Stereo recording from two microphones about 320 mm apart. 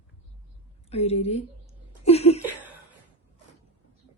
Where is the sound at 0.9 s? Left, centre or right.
Centre.